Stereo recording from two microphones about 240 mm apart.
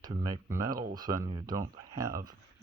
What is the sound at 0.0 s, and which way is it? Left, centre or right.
Speech, centre.